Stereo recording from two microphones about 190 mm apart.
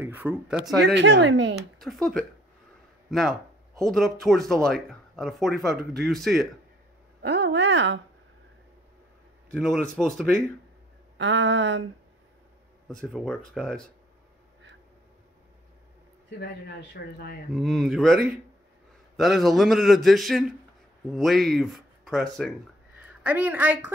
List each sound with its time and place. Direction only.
0.0 s speech: 10° right (ahead or behind)
0.8 s a woman's voice: 70° right (ahead or behind)
1.5 s speech: centre (ahead or behind)
7.2 s a woman's voice: 60° right (ahead or behind)
9.5 s speech: centre (ahead or behind)
11.1 s a woman's voice: 75° right (ahead or behind)
12.8 s speech: centre (ahead or behind)
16.3 s speech: 60° left (ahead or behind)
17.5 s a woman's voice: centre (ahead or behind)